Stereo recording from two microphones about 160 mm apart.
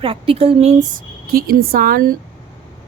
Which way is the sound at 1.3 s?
65° right (ahead or behind).